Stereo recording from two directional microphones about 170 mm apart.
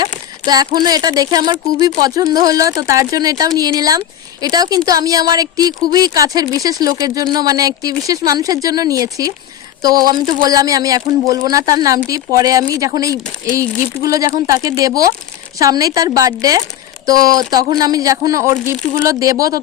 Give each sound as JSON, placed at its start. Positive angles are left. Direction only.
{"t": 0.4, "sound": "speech", "side_deg": -25}